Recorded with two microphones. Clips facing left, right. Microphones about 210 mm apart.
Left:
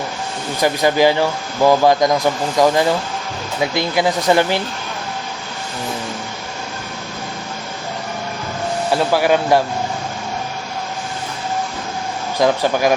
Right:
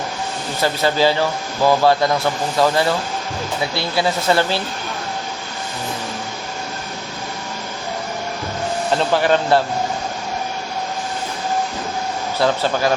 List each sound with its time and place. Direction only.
0.6 s a man's voice: 15° left (ahead or behind)
8.9 s a man's voice: 10° left (ahead or behind)
12.4 s a man's voice: 15° left (ahead or behind)